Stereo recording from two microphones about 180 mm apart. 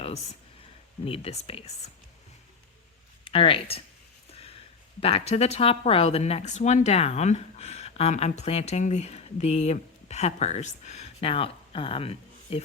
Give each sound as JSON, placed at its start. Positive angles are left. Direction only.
{"t": 1.0, "sound": "speech", "side_deg": 30}
{"t": 3.2, "sound": "speech", "side_deg": 30}
{"t": 4.3, "sound": "a sound", "side_deg": 30}
{"t": 4.9, "sound": "speech", "side_deg": 35}